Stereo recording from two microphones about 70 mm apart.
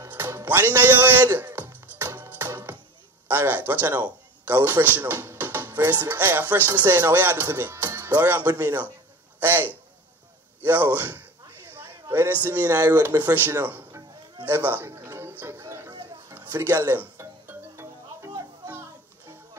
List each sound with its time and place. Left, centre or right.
0.1 s music: right
3.3 s speech: right
11.7 s a sound: right
12.4 s speech: right
14.9 s music: right
16.3 s speech: right
18.7 s music: right